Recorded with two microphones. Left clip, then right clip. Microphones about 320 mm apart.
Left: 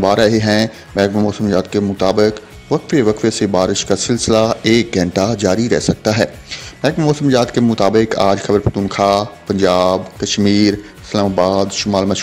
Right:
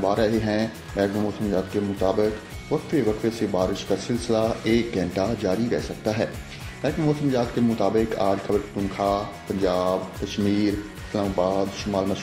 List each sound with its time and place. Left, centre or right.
0.0 s speech: left